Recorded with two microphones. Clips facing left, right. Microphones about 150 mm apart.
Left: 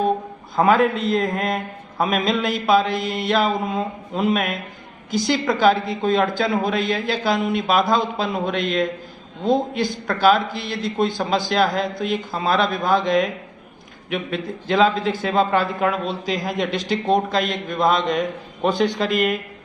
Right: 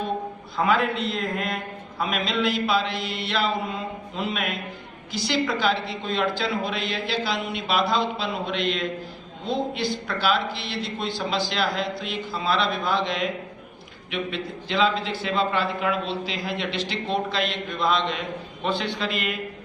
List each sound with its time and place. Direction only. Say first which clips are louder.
0.5 s a man's voice: left 6 dB; 45° left (ahead or behind)